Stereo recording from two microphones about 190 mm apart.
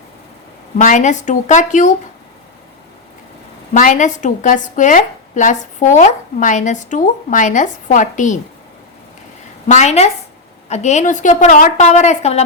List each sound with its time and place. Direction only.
0.8 s a woman's voice: 40° left (ahead or behind)
3.8 s a woman's voice: 40° left (ahead or behind)
9.7 s a woman's voice: 35° left (ahead or behind)